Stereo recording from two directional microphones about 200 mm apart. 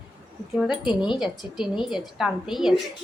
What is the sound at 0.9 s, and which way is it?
Speech, 25° left (ahead or behind).